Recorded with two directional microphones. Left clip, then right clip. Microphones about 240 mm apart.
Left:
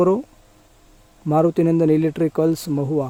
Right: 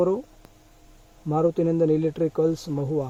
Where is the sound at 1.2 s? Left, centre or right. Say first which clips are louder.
Left 5 dB; left.